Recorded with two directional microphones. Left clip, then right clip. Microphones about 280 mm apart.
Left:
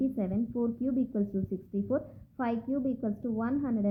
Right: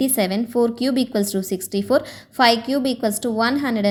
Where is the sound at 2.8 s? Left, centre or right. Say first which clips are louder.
Right 12 dB; right.